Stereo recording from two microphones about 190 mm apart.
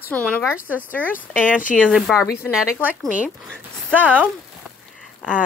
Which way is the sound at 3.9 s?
10° right (ahead or behind).